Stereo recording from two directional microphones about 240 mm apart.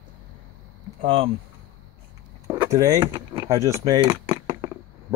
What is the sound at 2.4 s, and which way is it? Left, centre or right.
Speech, centre.